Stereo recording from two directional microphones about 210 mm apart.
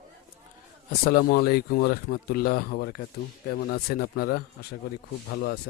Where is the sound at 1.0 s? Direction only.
45° left (ahead or behind).